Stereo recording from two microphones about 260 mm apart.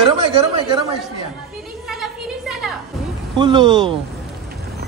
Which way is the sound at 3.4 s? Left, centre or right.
Centre.